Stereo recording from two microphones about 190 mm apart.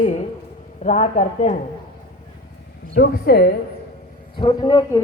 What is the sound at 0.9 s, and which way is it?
Speech, 40° left (ahead or behind).